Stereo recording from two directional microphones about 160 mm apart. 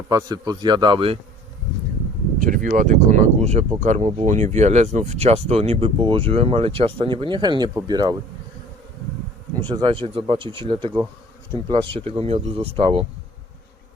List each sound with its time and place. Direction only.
0.1 s speech: 25° right (ahead or behind)
2.4 s speech: 55° right (ahead or behind); by 8.1 s 25° right (ahead or behind)
9.6 s speech: 30° right (ahead or behind)